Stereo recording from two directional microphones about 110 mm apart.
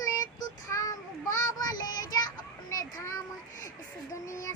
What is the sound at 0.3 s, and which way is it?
Child singing, 35° left (ahead or behind).